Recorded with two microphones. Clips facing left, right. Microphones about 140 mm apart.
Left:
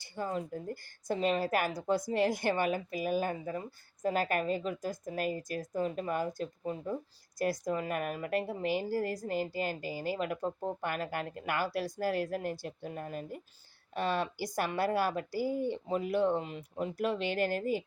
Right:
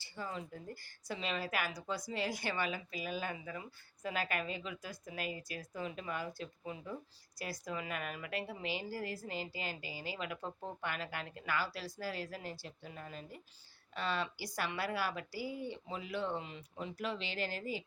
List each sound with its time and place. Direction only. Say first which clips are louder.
0.2 s a woman's voice: left 8 dB; 50° left (ahead or behind)